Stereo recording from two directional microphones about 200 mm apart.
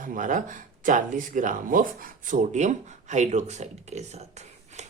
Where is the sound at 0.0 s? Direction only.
40° right (ahead or behind).